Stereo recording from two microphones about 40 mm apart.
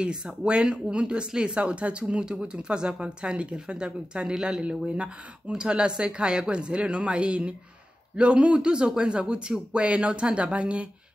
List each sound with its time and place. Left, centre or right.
0.0 s speech: right
4.6 s speech: right